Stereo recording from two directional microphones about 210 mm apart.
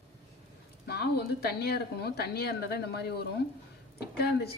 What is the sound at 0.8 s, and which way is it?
Speech, 50° left (ahead or behind).